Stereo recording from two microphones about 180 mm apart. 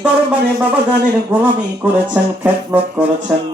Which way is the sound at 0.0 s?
10° right (ahead or behind).